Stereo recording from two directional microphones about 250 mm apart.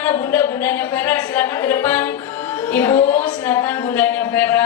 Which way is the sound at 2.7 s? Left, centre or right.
Centre.